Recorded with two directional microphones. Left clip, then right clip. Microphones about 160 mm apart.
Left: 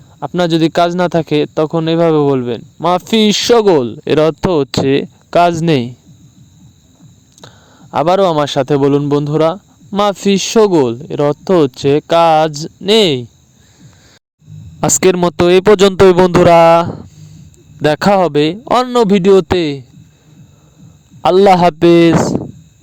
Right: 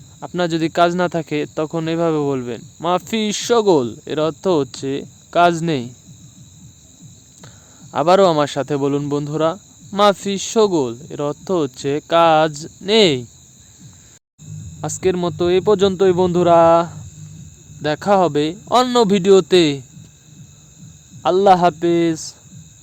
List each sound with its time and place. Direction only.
0.2 s a man's voice: 30° left (ahead or behind)
7.4 s a man's voice: 30° left (ahead or behind)
14.8 s speech: 75° left (ahead or behind)
17.8 s speech: 60° left (ahead or behind)
18.9 s speech: 45° left (ahead or behind)
21.2 s speech: 55° left (ahead or behind)